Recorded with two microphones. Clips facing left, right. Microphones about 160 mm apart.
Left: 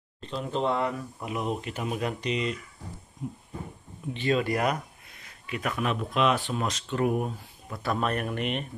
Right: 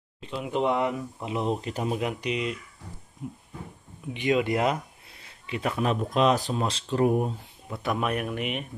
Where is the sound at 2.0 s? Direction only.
15° right (ahead or behind).